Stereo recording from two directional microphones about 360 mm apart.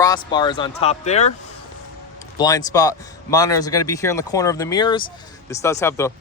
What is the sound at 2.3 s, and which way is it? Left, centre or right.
A man's voice, centre.